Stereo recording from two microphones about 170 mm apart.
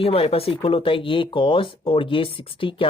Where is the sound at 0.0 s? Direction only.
35° left (ahead or behind).